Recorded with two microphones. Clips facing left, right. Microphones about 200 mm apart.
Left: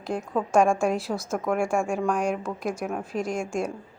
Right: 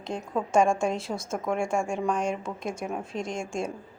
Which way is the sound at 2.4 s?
25° right (ahead or behind).